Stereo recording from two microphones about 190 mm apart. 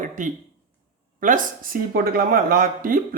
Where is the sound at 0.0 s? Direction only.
45° right (ahead or behind).